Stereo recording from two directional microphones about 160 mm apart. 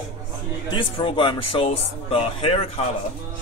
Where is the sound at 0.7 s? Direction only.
30° left (ahead or behind).